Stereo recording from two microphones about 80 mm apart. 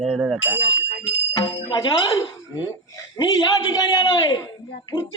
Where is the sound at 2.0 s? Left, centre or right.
Left.